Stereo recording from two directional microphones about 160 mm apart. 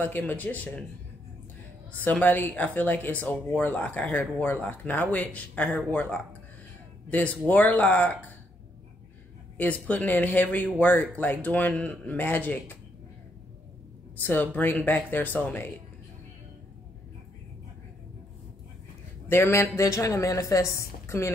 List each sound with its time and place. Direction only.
0.0 s speech: 10° left (ahead or behind)
1.9 s speech: 10° left (ahead or behind)
9.6 s speech: 10° left (ahead or behind)
14.2 s speech: 10° left (ahead or behind)
19.2 s speech: 15° left (ahead or behind)